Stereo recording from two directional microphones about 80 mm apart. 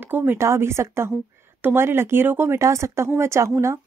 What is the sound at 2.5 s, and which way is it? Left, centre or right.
Speech, right.